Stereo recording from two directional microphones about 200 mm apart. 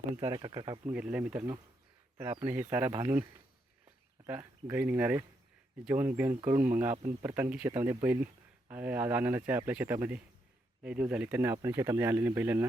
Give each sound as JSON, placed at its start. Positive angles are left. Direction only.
{"t": 0.1, "sound": "speech", "side_deg": -20}
{"t": 0.9, "sound": "speech", "side_deg": -5}
{"t": 4.3, "sound": "speech", "side_deg": -10}